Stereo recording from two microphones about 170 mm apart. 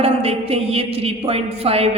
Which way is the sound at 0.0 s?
35° right (ahead or behind).